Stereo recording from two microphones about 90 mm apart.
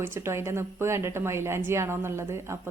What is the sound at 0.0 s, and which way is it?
A woman's voice, 30° right (ahead or behind).